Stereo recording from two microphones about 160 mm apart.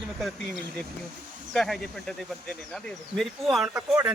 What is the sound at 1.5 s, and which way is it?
Speech, 5° left (ahead or behind).